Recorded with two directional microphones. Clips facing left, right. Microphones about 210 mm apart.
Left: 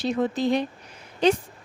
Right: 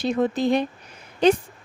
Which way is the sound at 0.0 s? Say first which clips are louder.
Right 2 dB; 55° right (ahead or behind).